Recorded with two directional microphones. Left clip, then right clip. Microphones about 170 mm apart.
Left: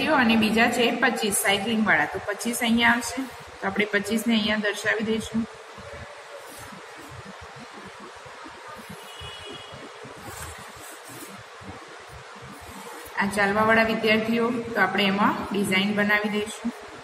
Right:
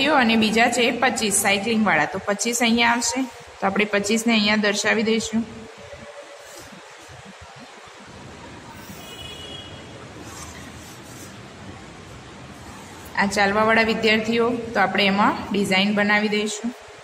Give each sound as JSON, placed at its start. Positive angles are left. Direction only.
{"t": 0.0, "sound": "a woman's voice", "side_deg": -70}
{"t": 13.1, "sound": "a woman's voice", "side_deg": -70}